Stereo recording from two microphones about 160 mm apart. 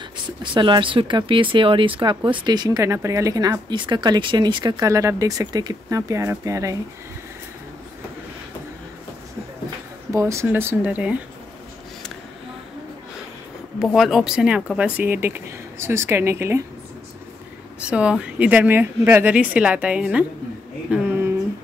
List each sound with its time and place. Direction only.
0.4 s speech: 30° right (ahead or behind)
10.1 s speech: 20° right (ahead or behind)
13.7 s speech: centre (ahead or behind); by 16.6 s 15° right (ahead or behind)
17.8 s speech: 5° right (ahead or behind)